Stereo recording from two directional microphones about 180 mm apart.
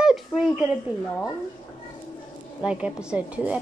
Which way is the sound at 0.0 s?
Centre (ahead or behind).